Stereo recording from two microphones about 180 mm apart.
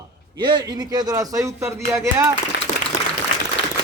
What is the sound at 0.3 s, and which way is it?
A man's voice, 25° right (ahead or behind).